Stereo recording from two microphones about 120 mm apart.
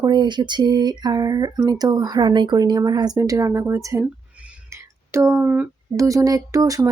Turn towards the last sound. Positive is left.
turn(degrees=-30)  # may be behind; listen again after turning